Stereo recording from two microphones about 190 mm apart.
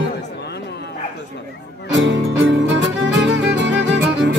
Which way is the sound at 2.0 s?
85° right.